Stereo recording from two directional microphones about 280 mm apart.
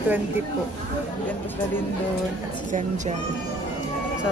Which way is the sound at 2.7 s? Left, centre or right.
Right.